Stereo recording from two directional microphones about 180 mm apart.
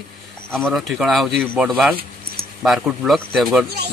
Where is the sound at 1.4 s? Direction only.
10° right (ahead or behind).